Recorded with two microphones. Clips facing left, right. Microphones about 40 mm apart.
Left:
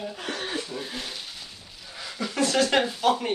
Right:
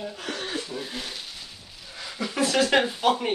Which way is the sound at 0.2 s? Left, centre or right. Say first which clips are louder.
Left 1 dB; centre.